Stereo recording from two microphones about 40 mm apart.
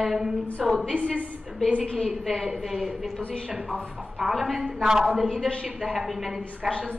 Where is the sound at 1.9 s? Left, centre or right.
Centre.